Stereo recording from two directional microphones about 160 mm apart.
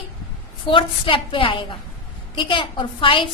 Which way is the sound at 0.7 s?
35° left (ahead or behind).